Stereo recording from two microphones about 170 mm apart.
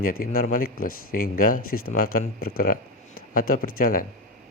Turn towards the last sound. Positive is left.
turn(degrees=55)  # may be behind; listen again after turning